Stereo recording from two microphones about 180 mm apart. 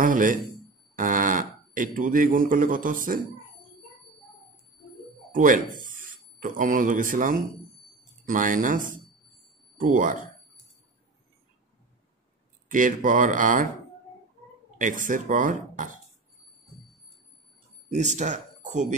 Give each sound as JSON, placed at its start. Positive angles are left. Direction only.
{"t": 0.0, "sound": "speech", "side_deg": -45}
{"t": 5.3, "sound": "speech", "side_deg": -50}
{"t": 12.7, "sound": "speech", "side_deg": -45}
{"t": 14.8, "sound": "speech", "side_deg": -45}
{"t": 17.8, "sound": "speech", "side_deg": -40}